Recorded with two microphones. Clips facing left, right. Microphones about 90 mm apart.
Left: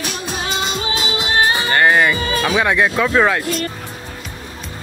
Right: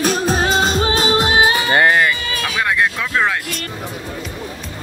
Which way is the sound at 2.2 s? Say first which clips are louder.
Left 6 dB; 35° left (ahead or behind).